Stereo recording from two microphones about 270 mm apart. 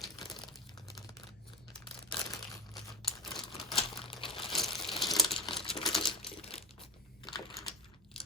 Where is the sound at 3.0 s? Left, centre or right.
Centre.